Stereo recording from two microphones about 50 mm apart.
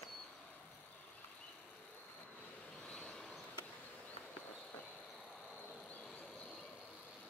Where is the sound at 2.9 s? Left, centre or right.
Centre.